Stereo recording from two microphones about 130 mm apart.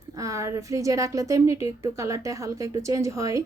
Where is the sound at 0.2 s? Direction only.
25° right (ahead or behind).